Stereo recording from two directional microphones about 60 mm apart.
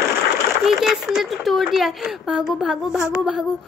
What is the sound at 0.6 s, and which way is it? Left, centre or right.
Speech, centre.